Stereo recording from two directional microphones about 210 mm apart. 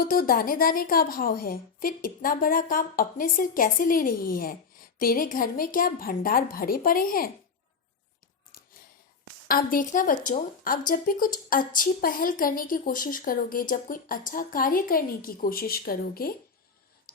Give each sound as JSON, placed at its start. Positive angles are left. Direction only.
{"t": 0.0, "sound": "a woman's voice", "side_deg": 45}
{"t": 9.5, "sound": "a woman's voice", "side_deg": 40}